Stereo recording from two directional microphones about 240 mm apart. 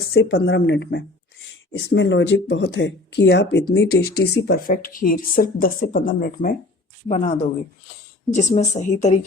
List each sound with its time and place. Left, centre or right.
0.1 s speech: left